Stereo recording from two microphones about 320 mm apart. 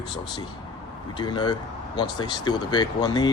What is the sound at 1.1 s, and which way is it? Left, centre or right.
Speech, centre.